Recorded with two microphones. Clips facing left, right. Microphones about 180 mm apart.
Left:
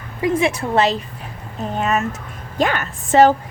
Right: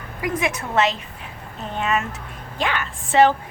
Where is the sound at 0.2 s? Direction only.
30° left (ahead or behind).